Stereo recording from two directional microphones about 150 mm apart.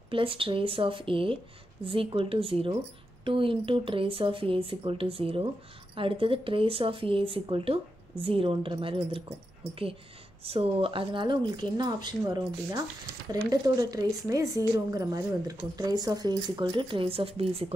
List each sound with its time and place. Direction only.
0.1 s speech: 35° right (ahead or behind)
10.4 s speech: 40° right (ahead or behind)